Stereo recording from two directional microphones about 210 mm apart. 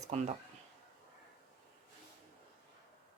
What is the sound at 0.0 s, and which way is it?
Speech, 35° right (ahead or behind).